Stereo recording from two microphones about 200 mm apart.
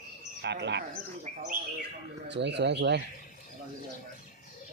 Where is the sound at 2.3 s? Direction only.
60° right (ahead or behind).